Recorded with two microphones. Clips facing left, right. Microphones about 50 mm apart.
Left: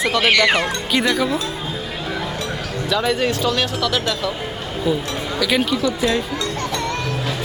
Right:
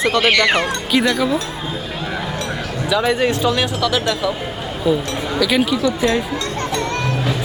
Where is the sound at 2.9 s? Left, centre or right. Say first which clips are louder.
Right 3 dB; centre.